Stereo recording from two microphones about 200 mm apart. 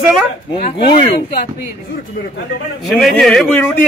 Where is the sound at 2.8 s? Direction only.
Centre (ahead or behind).